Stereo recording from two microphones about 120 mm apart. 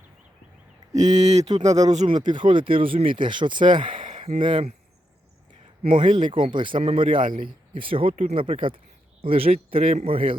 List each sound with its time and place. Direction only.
0.9 s speech: 75° right (ahead or behind)
2.2 s speech: 40° right (ahead or behind)
5.8 s speech: 45° right (ahead or behind)
8.1 s speech: 65° right (ahead or behind)
8.4 s speech: 45° right (ahead or behind)